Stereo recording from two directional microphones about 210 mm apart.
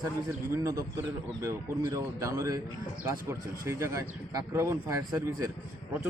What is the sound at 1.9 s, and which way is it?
Speech, 15° right (ahead or behind).